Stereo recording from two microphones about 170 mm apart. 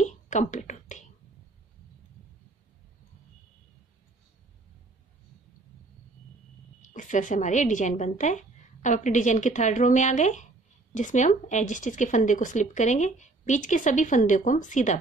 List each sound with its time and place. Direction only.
0.0 s whispering: 45° left (ahead or behind)
6.8 s speech: 50° left (ahead or behind)